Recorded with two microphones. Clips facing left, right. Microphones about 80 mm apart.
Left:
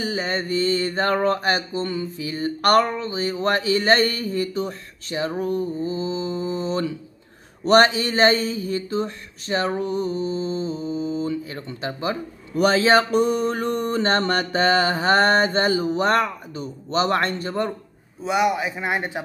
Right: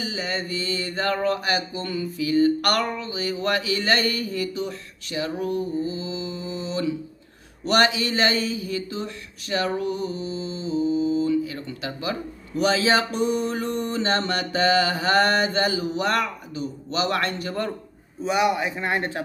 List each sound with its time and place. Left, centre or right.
0.0 s mantra: left
12.5 s mantra: left
18.2 s speech: centre